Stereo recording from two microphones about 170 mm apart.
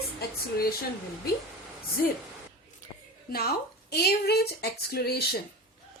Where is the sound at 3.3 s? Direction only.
65° left (ahead or behind).